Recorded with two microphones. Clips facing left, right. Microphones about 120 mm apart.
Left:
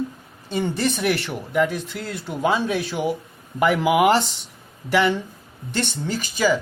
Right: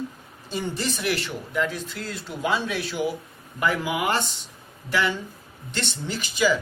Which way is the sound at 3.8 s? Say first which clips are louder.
Left 9 dB; 80° left.